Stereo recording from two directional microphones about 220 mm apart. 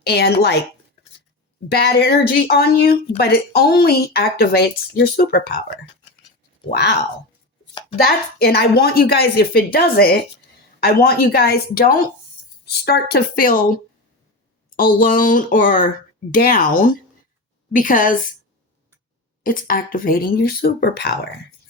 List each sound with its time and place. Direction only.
0.0 s a woman's voice: 50° left (ahead or behind)
1.7 s a woman's voice: 45° left (ahead or behind)
6.7 s a woman's voice: 50° left (ahead or behind)
8.4 s a woman's voice: 45° left (ahead or behind)
14.9 s speech: 40° left (ahead or behind)
19.4 s speech: 40° left (ahead or behind)